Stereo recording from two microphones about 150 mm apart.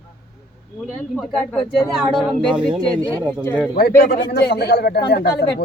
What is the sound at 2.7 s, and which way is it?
Speech, 25° right (ahead or behind).